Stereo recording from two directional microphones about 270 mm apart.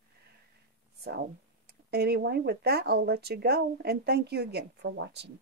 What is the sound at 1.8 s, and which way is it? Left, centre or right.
Speech, right.